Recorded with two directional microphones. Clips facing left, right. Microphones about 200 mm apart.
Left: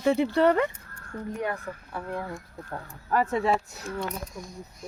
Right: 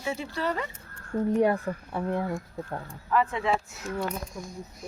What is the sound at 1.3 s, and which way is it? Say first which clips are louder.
Speech: right 8 dB; 30° right (ahead or behind).